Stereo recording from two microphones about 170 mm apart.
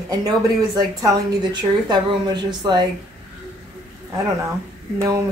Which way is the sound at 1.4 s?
25° right (ahead or behind).